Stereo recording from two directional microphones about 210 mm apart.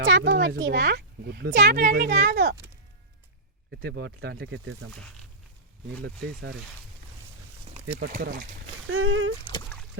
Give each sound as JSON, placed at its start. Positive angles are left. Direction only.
{"t": 0.0, "sound": "a sound", "side_deg": -60}
{"t": 0.3, "sound": "a child's voice", "side_deg": -55}
{"t": 1.8, "sound": "a woman's voice", "side_deg": -40}
{"t": 2.0, "sound": "a child's voice", "side_deg": -55}
{"t": 3.7, "sound": "speech", "side_deg": -50}
{"t": 7.7, "sound": "speech", "side_deg": -40}
{"t": 8.6, "sound": "speech", "side_deg": -75}